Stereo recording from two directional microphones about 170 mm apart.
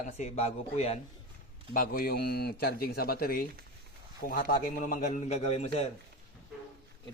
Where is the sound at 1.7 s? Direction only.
55° left (ahead or behind); by 5.7 s 40° left (ahead or behind).